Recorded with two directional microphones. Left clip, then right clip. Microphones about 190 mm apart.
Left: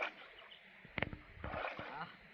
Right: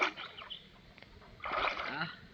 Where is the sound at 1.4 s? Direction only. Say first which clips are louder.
Right 9 dB; 10° right (ahead or behind).